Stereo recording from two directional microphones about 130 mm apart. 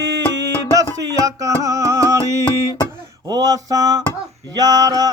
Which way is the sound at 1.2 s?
25° right (ahead or behind).